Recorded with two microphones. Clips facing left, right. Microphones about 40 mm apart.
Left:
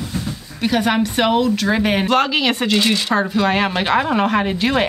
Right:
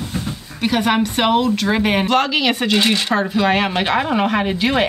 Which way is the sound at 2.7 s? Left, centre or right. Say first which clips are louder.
Right 1 dB; right.